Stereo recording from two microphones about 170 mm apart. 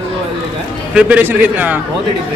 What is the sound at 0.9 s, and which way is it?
Speech, 5° right (ahead or behind).